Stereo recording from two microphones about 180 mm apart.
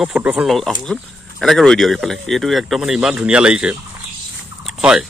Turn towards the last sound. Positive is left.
turn(degrees=-5)  # may be behind; listen again after turning